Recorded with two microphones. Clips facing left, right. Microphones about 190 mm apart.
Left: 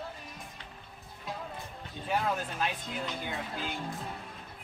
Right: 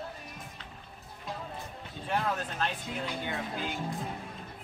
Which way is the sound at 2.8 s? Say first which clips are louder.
Right 1 dB; 10° right (ahead or behind).